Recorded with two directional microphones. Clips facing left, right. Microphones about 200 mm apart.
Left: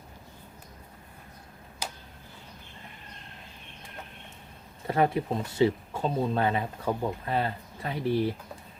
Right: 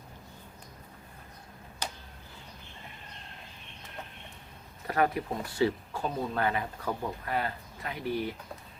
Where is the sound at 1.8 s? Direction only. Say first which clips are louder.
Even; 10° left (ahead or behind).